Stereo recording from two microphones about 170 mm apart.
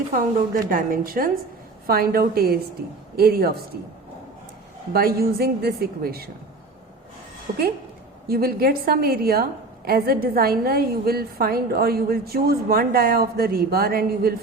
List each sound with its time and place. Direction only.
0.1 s a woman's voice: 55° right (ahead or behind)
4.9 s a woman's voice: 65° right (ahead or behind)
7.5 s a woman's voice: 55° right (ahead or behind)